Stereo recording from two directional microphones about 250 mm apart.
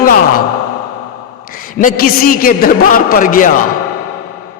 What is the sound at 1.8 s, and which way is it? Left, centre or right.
Speech, left.